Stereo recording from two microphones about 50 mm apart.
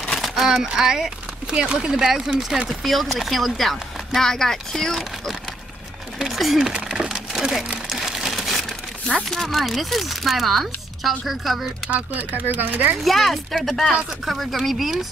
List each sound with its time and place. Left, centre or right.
0.2 s speech: centre
2.8 s speech: centre
6.1 s a sound: centre
6.7 s splinter: centre
7.9 s crumpling: centre
9.3 s speech: centre
11.9 s speech: right
13.0 s speech: centre